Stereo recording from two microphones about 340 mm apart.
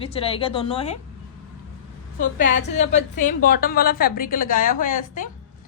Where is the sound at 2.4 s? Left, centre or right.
Left.